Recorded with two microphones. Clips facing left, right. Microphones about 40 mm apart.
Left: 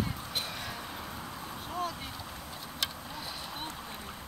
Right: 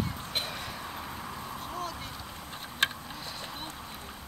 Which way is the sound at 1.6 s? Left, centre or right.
Centre.